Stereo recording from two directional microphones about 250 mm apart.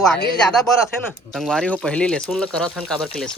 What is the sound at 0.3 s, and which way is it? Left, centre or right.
Speech, centre.